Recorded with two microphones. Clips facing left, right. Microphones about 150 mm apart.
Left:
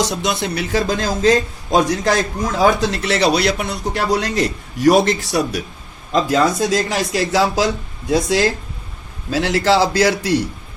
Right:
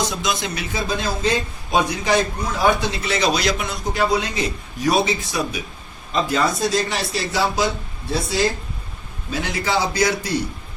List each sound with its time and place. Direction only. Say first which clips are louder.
0.0 s a man's voice: left 4 dB; 70° left (ahead or behind)
6.1 s speech: left 5 dB; 90° left